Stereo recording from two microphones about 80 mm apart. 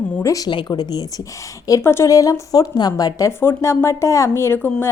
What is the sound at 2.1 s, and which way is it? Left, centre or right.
Speech, left.